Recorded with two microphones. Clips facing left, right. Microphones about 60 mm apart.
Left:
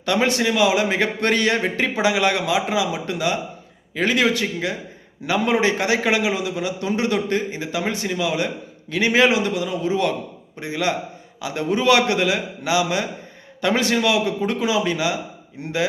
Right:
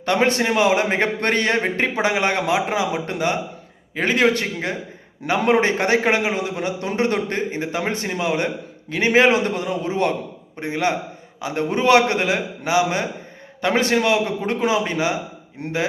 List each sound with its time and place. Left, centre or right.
0.0 s a man's voice: right